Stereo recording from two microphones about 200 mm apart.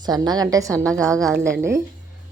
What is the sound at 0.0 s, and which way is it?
Speech, 20° right (ahead or behind).